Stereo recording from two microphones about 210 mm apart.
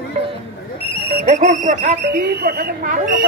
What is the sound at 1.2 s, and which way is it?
Speech, 35° right (ahead or behind).